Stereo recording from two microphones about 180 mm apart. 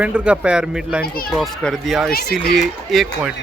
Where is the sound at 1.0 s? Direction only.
55° left (ahead or behind).